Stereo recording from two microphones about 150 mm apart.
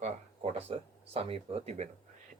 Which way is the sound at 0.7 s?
40° right (ahead or behind).